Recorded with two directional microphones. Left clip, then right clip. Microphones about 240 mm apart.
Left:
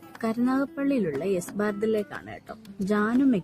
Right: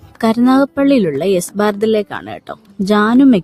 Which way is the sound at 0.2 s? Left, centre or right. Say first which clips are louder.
Right 14 dB; right.